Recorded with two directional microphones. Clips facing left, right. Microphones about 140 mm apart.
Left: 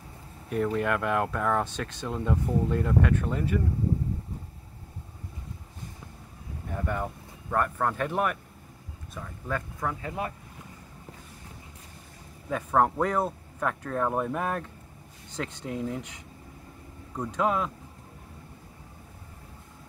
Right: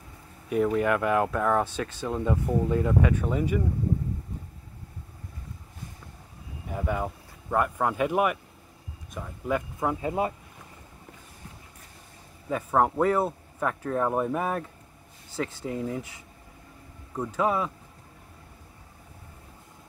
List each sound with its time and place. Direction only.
0.5 s speech: 5° right (ahead or behind)
6.7 s speech: 5° right (ahead or behind); by 10.3 s 20° right (ahead or behind)
12.4 s speech: 5° right (ahead or behind)